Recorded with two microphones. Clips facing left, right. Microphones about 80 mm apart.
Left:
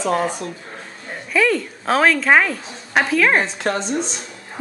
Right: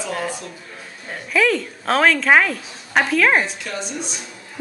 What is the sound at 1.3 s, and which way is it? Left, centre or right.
A woman's voice, centre.